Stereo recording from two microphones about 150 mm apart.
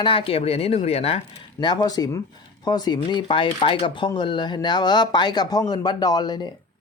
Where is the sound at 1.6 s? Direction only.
25° left (ahead or behind).